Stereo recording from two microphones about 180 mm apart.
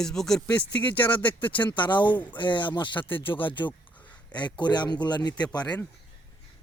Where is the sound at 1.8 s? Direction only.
25° left (ahead or behind).